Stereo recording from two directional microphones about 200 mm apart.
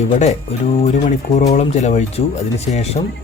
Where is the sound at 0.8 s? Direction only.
35° left (ahead or behind).